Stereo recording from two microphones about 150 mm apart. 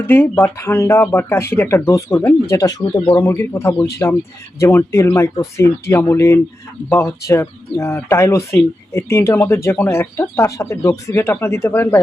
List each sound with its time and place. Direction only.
0.1 s speech: 15° left (ahead or behind)